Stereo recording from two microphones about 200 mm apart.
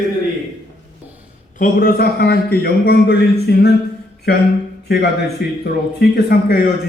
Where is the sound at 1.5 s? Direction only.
45° left (ahead or behind).